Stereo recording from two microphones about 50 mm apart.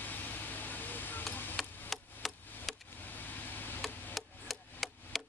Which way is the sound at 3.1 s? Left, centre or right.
Left.